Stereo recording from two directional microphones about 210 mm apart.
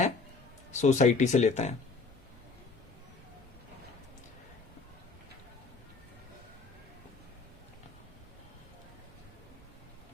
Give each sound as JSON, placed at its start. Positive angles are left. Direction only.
{"t": 0.7, "sound": "speech", "side_deg": 35}